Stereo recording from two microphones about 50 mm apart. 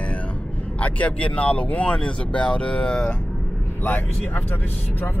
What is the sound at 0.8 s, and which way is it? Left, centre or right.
Speech, left.